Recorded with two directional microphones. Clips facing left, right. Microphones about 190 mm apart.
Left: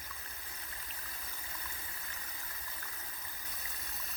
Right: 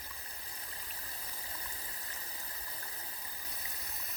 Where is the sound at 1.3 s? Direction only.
35° right (ahead or behind).